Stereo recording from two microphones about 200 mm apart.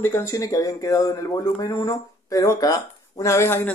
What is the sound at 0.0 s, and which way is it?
Speech, 10° left (ahead or behind).